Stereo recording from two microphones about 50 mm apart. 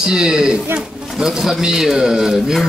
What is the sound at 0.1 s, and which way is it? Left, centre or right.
Speech, centre.